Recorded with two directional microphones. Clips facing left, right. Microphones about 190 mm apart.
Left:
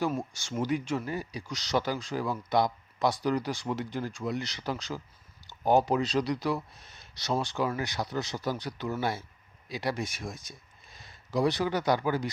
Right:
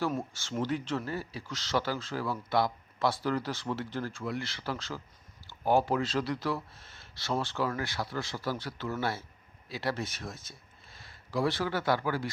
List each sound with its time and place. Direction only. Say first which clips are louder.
0.2 s speech: left 1 dB; 15° left (ahead or behind)